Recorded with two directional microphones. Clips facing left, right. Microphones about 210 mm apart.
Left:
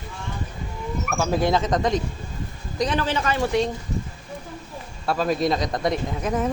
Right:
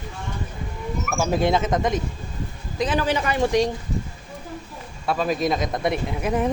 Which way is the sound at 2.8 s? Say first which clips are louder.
Right 1 dB; 10° right (ahead or behind).